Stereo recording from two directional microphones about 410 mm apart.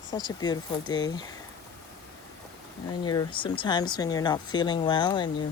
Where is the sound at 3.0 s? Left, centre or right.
Centre.